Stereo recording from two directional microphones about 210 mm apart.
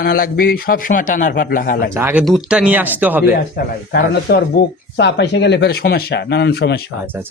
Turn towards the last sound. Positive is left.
turn(degrees=50)  # may be behind; listen again after turning